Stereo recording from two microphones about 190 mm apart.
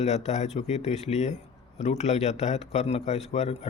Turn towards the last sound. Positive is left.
turn(degrees=35)  # may be behind; listen again after turning